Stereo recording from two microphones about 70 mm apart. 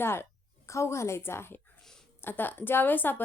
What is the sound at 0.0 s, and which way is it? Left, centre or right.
A woman's voice, left.